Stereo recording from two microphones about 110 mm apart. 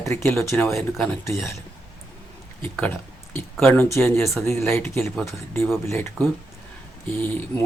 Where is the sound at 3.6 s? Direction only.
20° left (ahead or behind).